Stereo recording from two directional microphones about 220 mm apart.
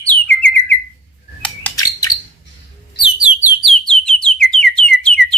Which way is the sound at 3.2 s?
5° right (ahead or behind).